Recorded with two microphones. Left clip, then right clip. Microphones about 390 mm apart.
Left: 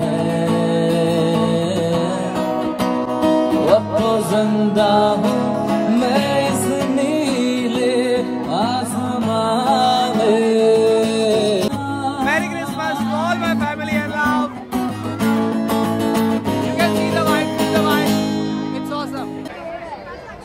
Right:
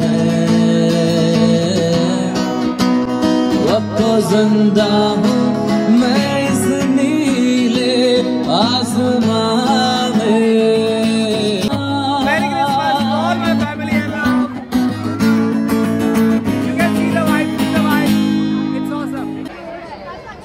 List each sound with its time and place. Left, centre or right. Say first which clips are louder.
0.0 s music: right 2 dB; centre
12.3 s music: right 6 dB; centre
15.3 s music: right 2 dB; centre